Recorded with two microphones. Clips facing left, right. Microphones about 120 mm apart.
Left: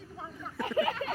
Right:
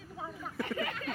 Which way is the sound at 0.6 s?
35° left (ahead or behind).